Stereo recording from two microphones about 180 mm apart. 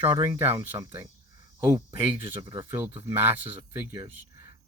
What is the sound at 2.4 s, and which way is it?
Speech, 25° right (ahead or behind).